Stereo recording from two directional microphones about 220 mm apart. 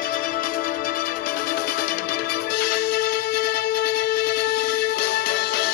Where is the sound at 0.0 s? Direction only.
40° left (ahead or behind).